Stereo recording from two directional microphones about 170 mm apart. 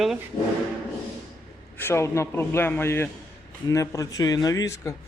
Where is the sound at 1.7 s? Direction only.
15° left (ahead or behind).